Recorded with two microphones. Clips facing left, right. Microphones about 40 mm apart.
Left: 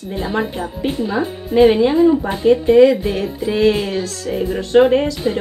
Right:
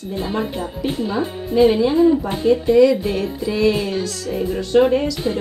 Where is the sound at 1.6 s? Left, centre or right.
Left.